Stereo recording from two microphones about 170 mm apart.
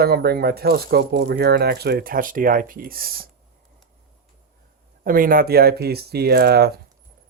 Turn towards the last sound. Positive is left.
turn(degrees=-65)  # may be behind; listen again after turning